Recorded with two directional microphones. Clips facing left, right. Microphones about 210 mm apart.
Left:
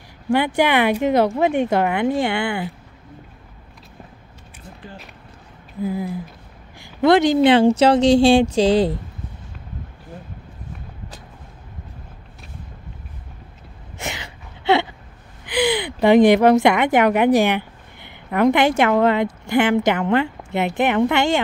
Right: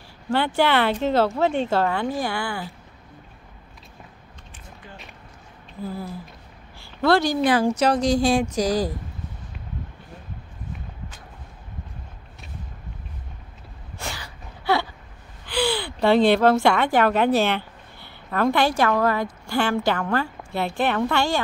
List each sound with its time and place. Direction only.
0.3 s speech: 15° left (ahead or behind)
5.9 s a woman's voice: 15° left (ahead or behind)
13.9 s gasp: 20° left (ahead or behind)
15.4 s a woman's voice: 15° left (ahead or behind)